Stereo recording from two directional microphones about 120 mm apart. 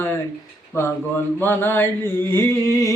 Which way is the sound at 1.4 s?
15° left (ahead or behind).